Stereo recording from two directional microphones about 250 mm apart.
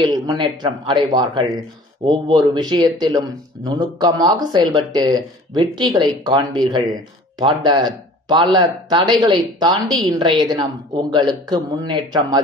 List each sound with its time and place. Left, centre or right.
0.0 s speech: centre